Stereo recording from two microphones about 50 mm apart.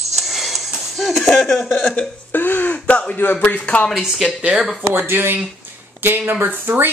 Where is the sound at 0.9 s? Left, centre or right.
Centre.